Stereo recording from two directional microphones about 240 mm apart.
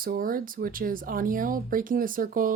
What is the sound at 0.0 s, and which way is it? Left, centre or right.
Speech, right.